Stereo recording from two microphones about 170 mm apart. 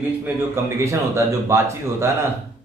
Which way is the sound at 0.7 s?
15° right (ahead or behind).